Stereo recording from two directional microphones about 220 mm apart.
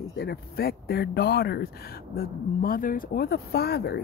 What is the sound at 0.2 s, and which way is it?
Speech, 45° left (ahead or behind).